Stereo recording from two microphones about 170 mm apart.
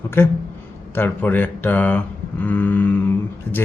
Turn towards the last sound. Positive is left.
turn(degrees=10)  # may be behind; listen again after turning